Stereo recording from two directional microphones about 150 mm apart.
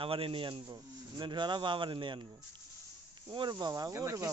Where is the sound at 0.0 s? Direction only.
40° right (ahead or behind).